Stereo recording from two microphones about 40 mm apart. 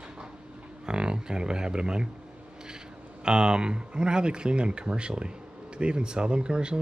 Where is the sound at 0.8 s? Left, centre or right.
Right.